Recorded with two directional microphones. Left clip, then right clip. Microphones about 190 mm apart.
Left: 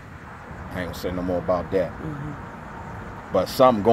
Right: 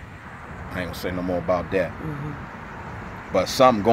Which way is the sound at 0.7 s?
5° left (ahead or behind).